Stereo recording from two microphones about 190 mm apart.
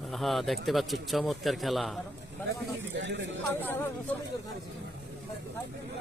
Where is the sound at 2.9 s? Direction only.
70° right (ahead or behind).